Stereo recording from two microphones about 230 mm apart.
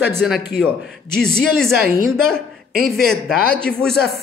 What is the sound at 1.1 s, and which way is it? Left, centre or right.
A man's voice, centre.